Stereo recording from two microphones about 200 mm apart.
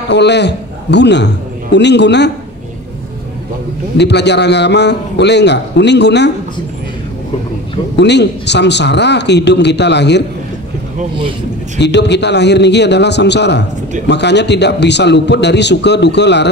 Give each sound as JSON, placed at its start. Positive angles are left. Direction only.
{"t": 0.1, "sound": "a man's voice", "side_deg": 60}
{"t": 4.0, "sound": "a man's voice", "side_deg": 60}
{"t": 8.0, "sound": "a man's voice", "side_deg": 60}
{"t": 11.8, "sound": "a man's voice", "side_deg": 60}